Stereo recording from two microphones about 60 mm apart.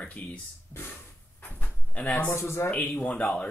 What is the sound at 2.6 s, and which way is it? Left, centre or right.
Speech, centre.